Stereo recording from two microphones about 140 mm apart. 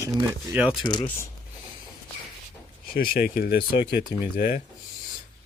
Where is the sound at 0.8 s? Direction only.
35° left (ahead or behind).